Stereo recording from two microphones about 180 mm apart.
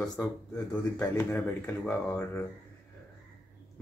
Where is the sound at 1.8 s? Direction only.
10° left (ahead or behind).